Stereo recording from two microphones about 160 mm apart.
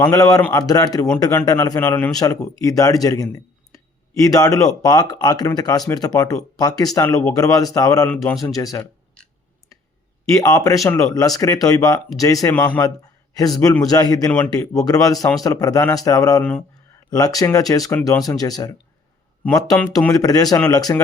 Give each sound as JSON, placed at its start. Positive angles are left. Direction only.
{"t": 0.0, "sound": "a man's voice", "side_deg": 20}
{"t": 8.1, "sound": "speech", "side_deg": 10}
{"t": 8.4, "sound": "a man's voice", "side_deg": 20}
{"t": 10.3, "sound": "a man's voice", "side_deg": 20}
{"t": 13.3, "sound": "a man's voice", "side_deg": 25}
{"t": 16.4, "sound": "speech", "side_deg": 10}
{"t": 17.1, "sound": "a man's voice", "side_deg": 20}
{"t": 20.1, "sound": "a man's voice", "side_deg": 20}